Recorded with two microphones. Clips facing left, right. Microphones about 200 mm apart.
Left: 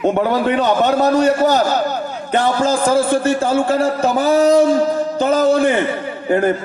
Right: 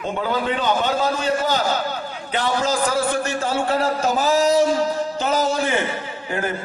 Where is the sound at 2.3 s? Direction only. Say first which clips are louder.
Left 6 dB; 55° left (ahead or behind).